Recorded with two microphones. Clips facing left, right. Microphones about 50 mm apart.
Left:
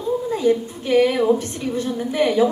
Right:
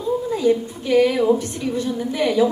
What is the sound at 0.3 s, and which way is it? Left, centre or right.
A woman's voice, left.